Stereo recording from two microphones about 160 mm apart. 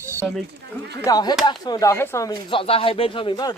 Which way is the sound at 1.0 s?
25° left (ahead or behind).